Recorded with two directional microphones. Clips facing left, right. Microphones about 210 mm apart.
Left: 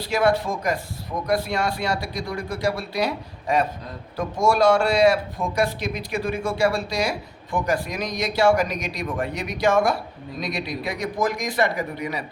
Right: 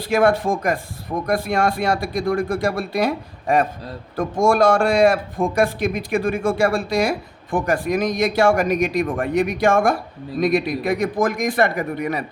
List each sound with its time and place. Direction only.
0.0 s a man's voice: 50° right (ahead or behind)